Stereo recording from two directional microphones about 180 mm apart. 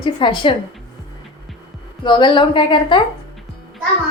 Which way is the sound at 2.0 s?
25° left (ahead or behind).